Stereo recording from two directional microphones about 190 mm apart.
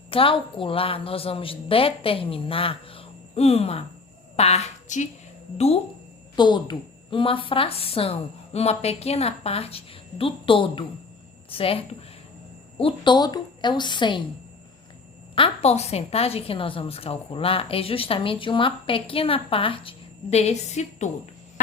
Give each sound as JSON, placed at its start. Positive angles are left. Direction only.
{"t": 0.1, "sound": "a woman's voice", "side_deg": 30}
{"t": 12.8, "sound": "a woman's voice", "side_deg": 25}
{"t": 15.4, "sound": "a woman's voice", "side_deg": 35}